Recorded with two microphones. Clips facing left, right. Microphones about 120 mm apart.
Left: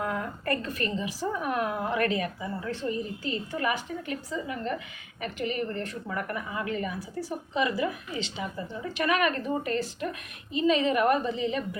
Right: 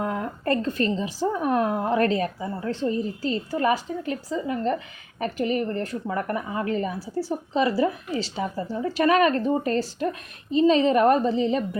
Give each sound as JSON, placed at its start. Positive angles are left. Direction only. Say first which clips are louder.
{"t": 0.0, "sound": "a woman's voice", "louder": "right 4 dB", "side_deg": -30}